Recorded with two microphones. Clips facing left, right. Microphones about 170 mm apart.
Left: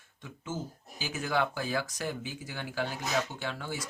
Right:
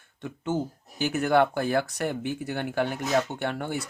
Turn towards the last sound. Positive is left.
turn(degrees=-60)  # may be behind; listen again after turning